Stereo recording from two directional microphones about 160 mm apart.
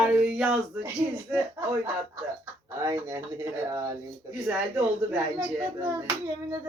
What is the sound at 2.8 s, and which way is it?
Speech, 20° right (ahead or behind).